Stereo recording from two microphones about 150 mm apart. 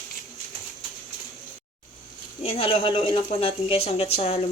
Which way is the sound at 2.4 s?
40° left (ahead or behind).